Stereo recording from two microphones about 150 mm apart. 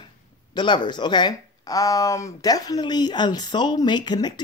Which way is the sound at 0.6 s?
30° left (ahead or behind).